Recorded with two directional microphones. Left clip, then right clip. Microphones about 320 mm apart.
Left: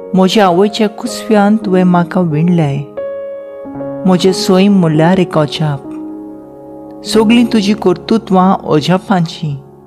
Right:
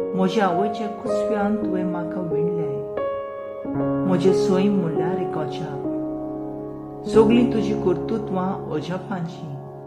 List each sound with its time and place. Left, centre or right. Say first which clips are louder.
0.2 s speech: left 13 dB; left
4.0 s speech: left 8 dB; left
7.1 s speech: left 6 dB; left